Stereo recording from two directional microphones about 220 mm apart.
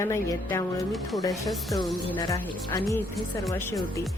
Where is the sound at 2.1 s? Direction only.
20° left (ahead or behind).